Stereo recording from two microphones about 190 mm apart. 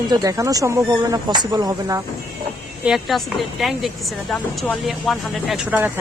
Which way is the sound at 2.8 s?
Centre (ahead or behind).